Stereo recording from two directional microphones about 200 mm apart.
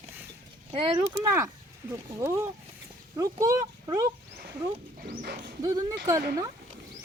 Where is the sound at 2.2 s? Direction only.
15° right (ahead or behind).